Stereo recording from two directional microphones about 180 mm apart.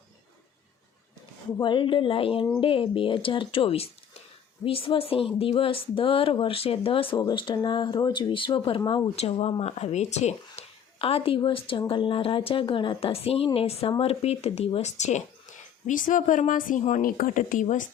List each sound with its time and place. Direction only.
1.5 s a woman's voice: 25° left (ahead or behind); by 17.8 s 45° left (ahead or behind)